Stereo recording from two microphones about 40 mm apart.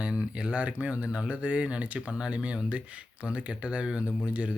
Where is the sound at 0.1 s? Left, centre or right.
Right.